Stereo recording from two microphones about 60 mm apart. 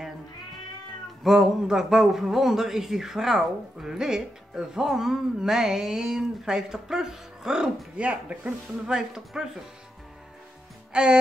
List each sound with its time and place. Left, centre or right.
1.2 s a man's voice: centre
10.9 s music: centre